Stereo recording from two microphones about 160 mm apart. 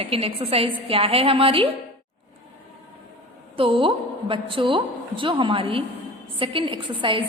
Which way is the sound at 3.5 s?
35° right (ahead or behind).